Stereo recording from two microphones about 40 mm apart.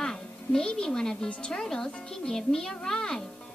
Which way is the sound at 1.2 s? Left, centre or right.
Left.